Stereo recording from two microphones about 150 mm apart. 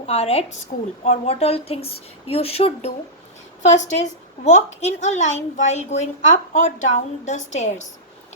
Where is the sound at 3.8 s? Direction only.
55° left (ahead or behind).